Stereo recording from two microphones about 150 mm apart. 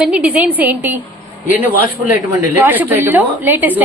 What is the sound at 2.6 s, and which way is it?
A woman's voice, 10° right (ahead or behind).